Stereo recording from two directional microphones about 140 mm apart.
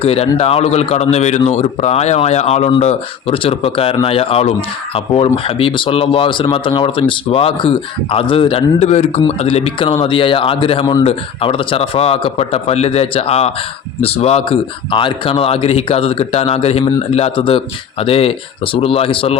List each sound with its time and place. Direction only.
0.0 s a man's voice: 45° left (ahead or behind)